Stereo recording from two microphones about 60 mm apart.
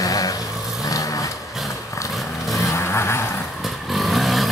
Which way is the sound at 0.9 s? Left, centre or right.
Left.